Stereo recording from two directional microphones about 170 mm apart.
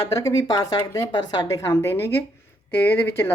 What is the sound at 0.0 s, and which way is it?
Speech, 20° left (ahead or behind).